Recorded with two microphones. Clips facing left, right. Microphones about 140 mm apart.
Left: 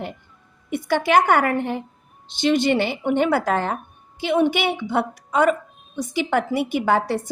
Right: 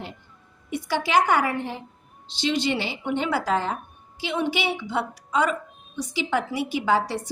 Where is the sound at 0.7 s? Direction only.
55° left (ahead or behind).